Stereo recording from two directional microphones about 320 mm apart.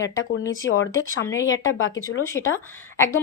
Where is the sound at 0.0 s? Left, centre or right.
Left.